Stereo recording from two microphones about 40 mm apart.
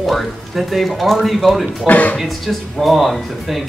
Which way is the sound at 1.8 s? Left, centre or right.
Left.